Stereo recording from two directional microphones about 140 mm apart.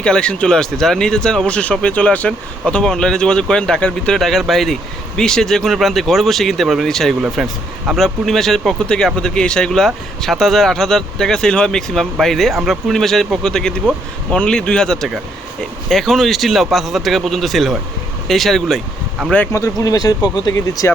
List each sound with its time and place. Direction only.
0.0 s speech: 5° left (ahead or behind)
19.3 s speech: 15° left (ahead or behind)